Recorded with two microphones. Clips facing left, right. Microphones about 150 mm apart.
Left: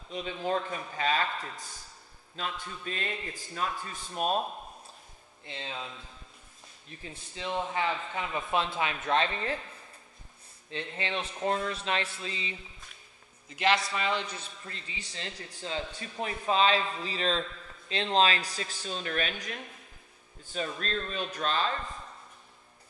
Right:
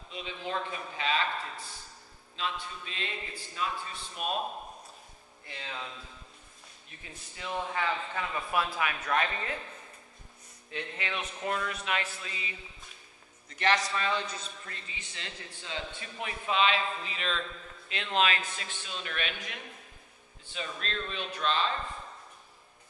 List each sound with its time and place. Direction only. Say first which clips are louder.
0.1 s a man's voice: left 5 dB; 45° left (ahead or behind)
5.4 s speech: left 2 dB; 25° left (ahead or behind)
7.0 s speech: left 4 dB; 25° left (ahead or behind)
10.7 s speech: left 2 dB; 30° left (ahead or behind)
13.5 s a man's voice: left 1 dB; 15° left (ahead or behind)
14.7 s a man's voice: left 2 dB; 30° left (ahead or behind)